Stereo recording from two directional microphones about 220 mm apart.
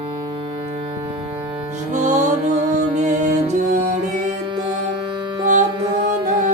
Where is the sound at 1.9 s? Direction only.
35° right (ahead or behind).